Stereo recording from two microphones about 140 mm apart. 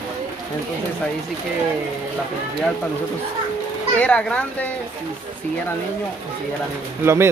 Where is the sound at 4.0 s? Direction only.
10° left (ahead or behind).